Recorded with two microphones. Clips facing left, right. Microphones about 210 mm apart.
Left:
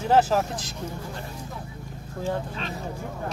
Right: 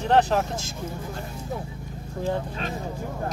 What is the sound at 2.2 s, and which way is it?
Speech, 45° right (ahead or behind).